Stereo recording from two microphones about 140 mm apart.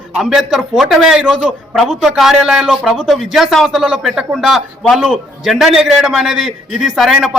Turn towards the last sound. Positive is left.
turn(degrees=0)  # may be behind; listen again after turning